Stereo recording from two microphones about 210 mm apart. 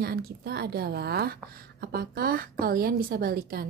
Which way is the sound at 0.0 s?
50° right (ahead or behind).